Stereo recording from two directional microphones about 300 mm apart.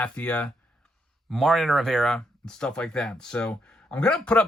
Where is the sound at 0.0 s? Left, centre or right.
Centre.